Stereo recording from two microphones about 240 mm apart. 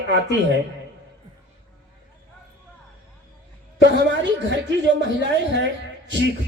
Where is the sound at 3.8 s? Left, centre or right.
Right.